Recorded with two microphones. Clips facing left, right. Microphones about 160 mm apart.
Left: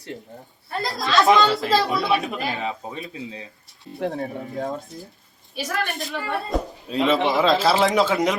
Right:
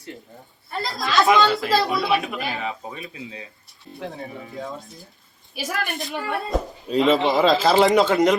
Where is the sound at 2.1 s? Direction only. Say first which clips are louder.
Even; 35° left (ahead or behind).